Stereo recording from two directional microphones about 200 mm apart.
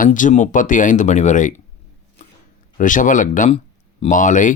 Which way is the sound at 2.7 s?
40° left (ahead or behind).